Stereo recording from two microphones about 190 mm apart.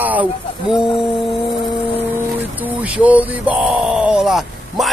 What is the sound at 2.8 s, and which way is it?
Speech, 5° right (ahead or behind).